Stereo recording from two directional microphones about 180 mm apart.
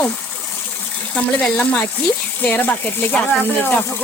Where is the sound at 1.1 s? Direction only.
5° left (ahead or behind).